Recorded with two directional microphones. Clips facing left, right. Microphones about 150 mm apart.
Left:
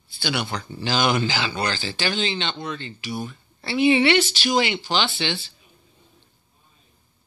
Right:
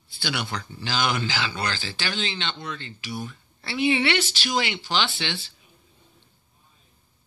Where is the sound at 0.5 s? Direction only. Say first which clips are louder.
Left 5 dB; 25° left (ahead or behind); by 5.4 s centre (ahead or behind).